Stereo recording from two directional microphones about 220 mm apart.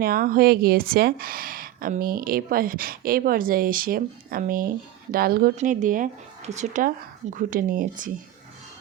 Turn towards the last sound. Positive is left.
turn(degrees=-40)  # may be behind; listen again after turning